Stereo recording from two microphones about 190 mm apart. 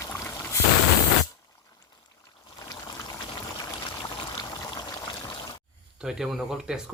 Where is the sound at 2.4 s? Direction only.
20° left (ahead or behind).